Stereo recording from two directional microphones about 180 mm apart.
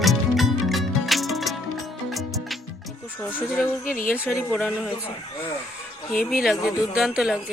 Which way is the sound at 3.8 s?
50° left (ahead or behind).